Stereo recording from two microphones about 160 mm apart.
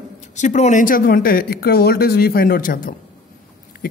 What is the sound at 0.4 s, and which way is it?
Speech, 45° left (ahead or behind).